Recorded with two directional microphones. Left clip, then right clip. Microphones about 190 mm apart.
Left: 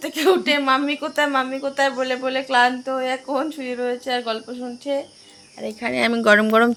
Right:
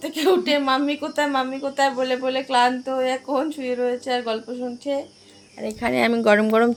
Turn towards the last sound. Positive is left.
turn(degrees=0)  # may be behind; listen again after turning